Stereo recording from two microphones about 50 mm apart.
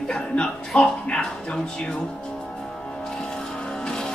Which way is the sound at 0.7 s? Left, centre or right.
Left.